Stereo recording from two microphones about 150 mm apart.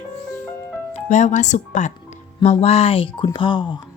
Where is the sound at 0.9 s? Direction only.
50° left (ahead or behind).